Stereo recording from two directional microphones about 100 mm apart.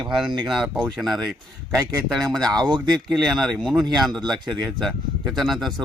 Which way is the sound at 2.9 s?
5° left (ahead or behind).